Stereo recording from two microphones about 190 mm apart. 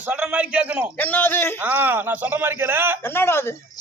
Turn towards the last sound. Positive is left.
turn(degrees=10)  # may be behind; listen again after turning